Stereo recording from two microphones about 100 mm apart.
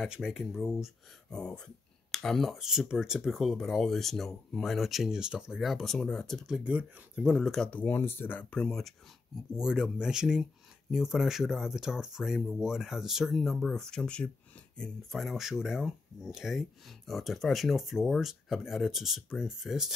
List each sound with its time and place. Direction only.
0.0 s speech: 5° right (ahead or behind)
1.3 s speech: 10° left (ahead or behind)
7.7 s speech: 20° left (ahead or behind)
8.5 s speech: 5° left (ahead or behind)
9.6 s speech: 5° right (ahead or behind)